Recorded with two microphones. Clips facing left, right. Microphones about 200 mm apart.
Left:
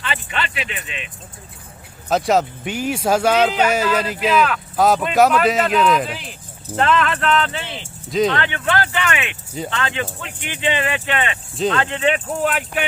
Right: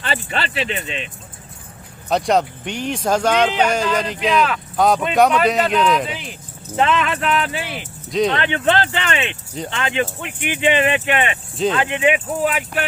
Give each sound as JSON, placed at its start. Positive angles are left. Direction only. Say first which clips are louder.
{"t": 0.0, "sound": "speech", "louder": "right 2 dB", "side_deg": -35}
{"t": 2.0, "sound": "speech", "louder": "even", "side_deg": 0}
{"t": 8.3, "sound": "speech", "louder": "right 3 dB", "side_deg": -20}